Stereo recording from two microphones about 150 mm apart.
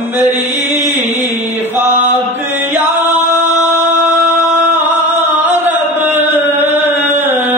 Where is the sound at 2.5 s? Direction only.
15° right (ahead or behind).